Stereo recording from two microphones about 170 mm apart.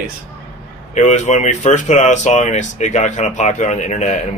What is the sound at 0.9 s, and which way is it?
Speech, 45° left (ahead or behind).